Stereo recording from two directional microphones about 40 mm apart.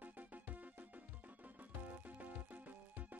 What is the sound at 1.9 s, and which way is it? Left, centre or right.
Music, right.